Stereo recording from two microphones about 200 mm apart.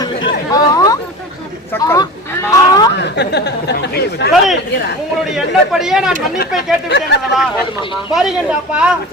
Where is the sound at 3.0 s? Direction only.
60° left (ahead or behind).